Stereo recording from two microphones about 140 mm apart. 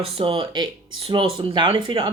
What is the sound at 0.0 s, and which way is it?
Speech, 40° right (ahead or behind).